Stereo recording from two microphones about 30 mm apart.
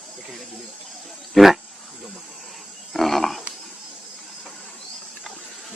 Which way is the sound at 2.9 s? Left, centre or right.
Centre.